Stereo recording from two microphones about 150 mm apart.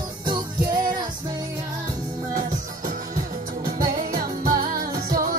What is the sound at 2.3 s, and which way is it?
Music, 60° right (ahead or behind).